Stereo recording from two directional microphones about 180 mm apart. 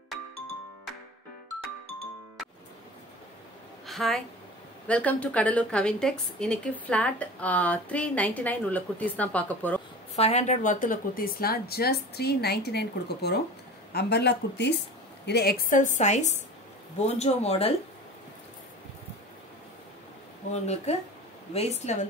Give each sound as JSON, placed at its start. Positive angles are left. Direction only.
{"t": 3.8, "sound": "a sound", "side_deg": 0}
{"t": 4.8, "sound": "a woman's voice", "side_deg": 5}
{"t": 10.1, "sound": "a woman's voice", "side_deg": 35}
{"t": 20.5, "sound": "speech", "side_deg": 35}